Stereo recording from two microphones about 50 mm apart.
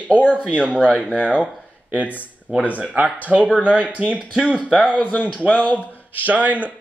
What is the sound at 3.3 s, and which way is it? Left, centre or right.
Speech, right.